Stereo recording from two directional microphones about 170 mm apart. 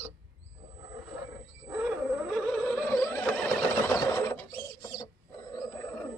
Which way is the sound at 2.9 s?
10° left (ahead or behind).